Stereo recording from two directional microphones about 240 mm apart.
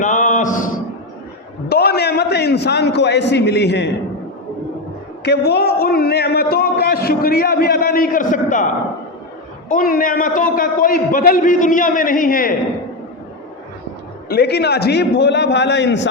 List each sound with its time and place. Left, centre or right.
0.0 s a sound: left
1.7 s a man's voice: left
5.2 s a man's voice: left
9.6 s a man's voice: left
14.3 s a man's voice: left